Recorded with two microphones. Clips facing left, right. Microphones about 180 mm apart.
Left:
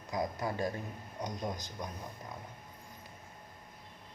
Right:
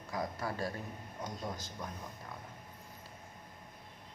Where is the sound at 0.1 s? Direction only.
20° left (ahead or behind).